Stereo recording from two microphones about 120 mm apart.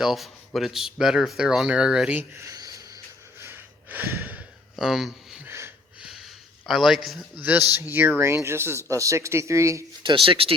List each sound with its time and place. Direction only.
0.0 s speech: centre (ahead or behind)
2.4 s a sound: 30° right (ahead or behind)
3.4 s snort: 15° right (ahead or behind)
4.8 s speech: 5° right (ahead or behind)
5.5 s wheeze: 20° right (ahead or behind)
6.0 s a sound: 5° right (ahead or behind)
7.3 s speech: 15° right (ahead or behind)
10.0 s speech: 45° right (ahead or behind)